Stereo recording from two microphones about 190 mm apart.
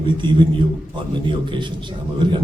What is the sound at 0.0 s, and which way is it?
A man's voice, 25° right (ahead or behind).